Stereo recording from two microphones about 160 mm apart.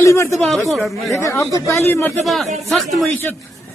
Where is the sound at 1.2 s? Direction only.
20° left (ahead or behind).